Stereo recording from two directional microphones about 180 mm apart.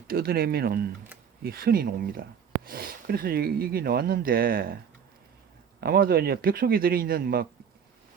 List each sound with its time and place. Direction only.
0.1 s speech: 55° right (ahead or behind)
5.8 s speech: 55° right (ahead or behind)